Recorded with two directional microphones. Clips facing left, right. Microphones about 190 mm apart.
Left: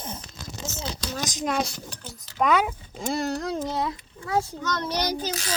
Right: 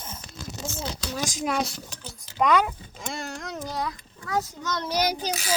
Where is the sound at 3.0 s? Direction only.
35° left (ahead or behind).